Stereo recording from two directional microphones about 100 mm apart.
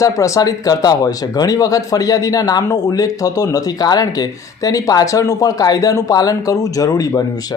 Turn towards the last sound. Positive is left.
turn(degrees=35)  # may be behind; listen again after turning